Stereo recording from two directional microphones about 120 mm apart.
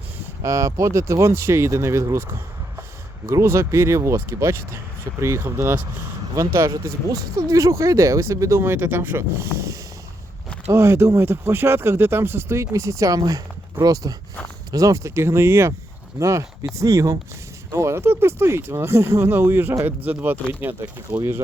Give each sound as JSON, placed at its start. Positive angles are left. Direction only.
{"t": 0.4, "sound": "speech", "side_deg": -25}
{"t": 3.2, "sound": "speech", "side_deg": -25}